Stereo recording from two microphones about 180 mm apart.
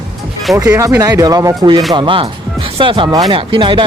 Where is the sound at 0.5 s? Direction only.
15° right (ahead or behind).